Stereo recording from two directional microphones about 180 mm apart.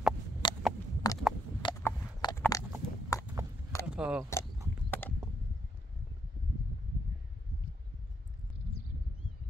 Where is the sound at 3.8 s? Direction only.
5° right (ahead or behind).